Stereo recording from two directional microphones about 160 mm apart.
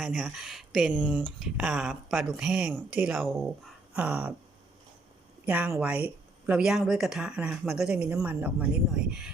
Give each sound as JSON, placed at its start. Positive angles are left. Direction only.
{"t": 0.0, "sound": "speech", "side_deg": -5}
{"t": 5.5, "sound": "speech", "side_deg": -10}